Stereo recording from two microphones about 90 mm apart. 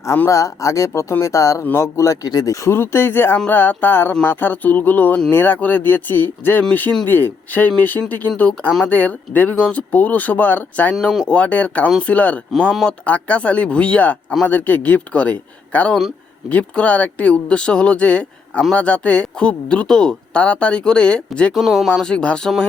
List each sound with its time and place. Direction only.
0.3 s speech: 35° left (ahead or behind); by 10.9 s 20° left (ahead or behind)
11.0 s speech: centre (ahead or behind)
11.3 s speech: 15° left (ahead or behind)
12.5 s speech: 5° left (ahead or behind)
13.1 s speech: 15° left (ahead or behind)
21.5 s speech: centre (ahead or behind)